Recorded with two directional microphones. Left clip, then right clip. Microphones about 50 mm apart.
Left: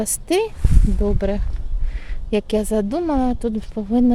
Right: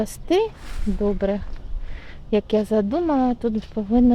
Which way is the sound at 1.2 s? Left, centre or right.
Left.